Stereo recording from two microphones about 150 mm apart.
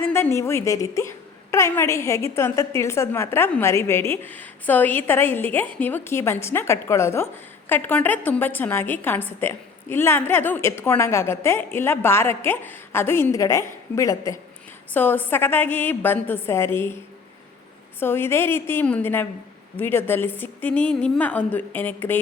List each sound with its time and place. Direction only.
0.0 s a woman's voice: 15° left (ahead or behind)
18.0 s a woman's voice: 15° left (ahead or behind)